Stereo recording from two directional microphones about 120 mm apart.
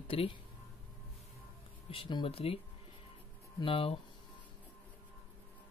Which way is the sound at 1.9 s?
45° left (ahead or behind).